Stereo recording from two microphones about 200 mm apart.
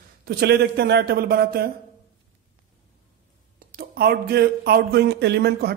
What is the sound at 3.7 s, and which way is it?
A man's voice, 50° right (ahead or behind).